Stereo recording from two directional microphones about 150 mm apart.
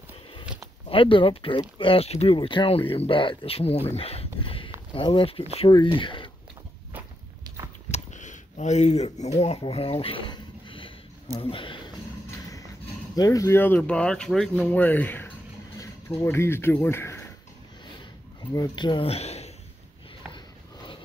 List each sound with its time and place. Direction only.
0.8 s speech: 35° left (ahead or behind)
7.9 s speech: 55° left (ahead or behind); by 11.9 s 35° left (ahead or behind)
13.1 s speech: 25° left (ahead or behind)
18.5 s speech: 25° left (ahead or behind); by 19.5 s 45° left (ahead or behind)
20.3 s a sound: 35° left (ahead or behind)